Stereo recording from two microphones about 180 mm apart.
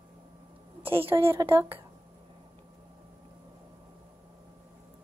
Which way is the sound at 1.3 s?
15° right (ahead or behind).